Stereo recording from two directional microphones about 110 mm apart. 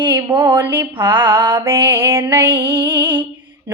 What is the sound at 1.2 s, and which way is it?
Female singing, 50° right (ahead or behind).